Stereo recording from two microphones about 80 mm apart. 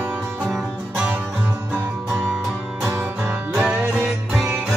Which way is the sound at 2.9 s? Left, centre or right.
Right.